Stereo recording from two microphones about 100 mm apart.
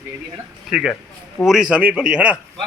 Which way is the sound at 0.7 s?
5° right (ahead or behind).